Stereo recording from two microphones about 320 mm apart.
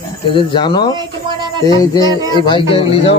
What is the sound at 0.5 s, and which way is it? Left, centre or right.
Speech, centre.